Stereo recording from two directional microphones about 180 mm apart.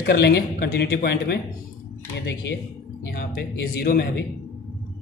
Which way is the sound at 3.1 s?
60° left (ahead or behind).